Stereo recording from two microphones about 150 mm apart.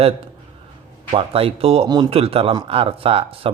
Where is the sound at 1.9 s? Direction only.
30° right (ahead or behind).